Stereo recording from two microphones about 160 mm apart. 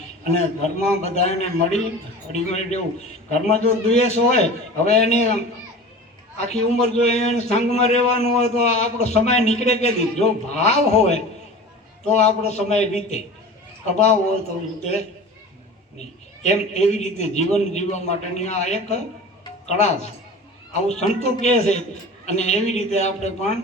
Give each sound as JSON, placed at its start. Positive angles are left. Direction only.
{"t": 0.3, "sound": "a man's voice", "side_deg": 45}
{"t": 16.0, "sound": "a man's voice", "side_deg": 45}